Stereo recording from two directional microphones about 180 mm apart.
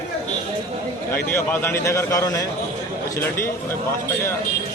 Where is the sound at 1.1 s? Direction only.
10° left (ahead or behind).